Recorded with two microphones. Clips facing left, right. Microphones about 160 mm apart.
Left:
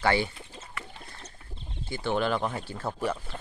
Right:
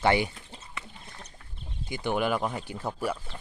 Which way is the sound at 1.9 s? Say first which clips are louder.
Even; 15° right (ahead or behind).